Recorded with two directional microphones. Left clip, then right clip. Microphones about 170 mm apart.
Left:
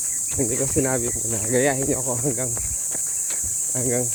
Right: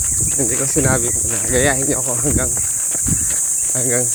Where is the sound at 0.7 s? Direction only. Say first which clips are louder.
Right 6 dB; 20° left (ahead or behind).